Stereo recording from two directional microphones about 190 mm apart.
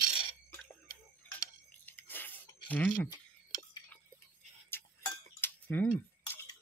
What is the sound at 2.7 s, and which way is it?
Speech, 10° left (ahead or behind).